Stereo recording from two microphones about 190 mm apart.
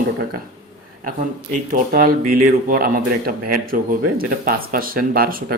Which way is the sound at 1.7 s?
50° right (ahead or behind).